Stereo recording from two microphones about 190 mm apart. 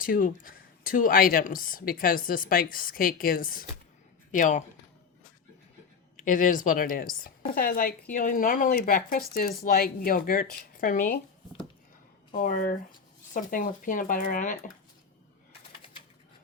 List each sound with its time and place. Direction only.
0.0 s speech: 45° left (ahead or behind)
6.1 s speech: 45° left (ahead or behind)
12.3 s speech: 45° left (ahead or behind)